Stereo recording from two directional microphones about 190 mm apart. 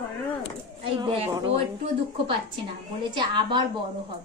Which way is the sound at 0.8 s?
30° right (ahead or behind).